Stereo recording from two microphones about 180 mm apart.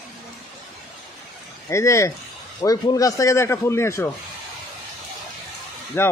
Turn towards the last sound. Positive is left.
turn(degrees=10)  # may be behind; listen again after turning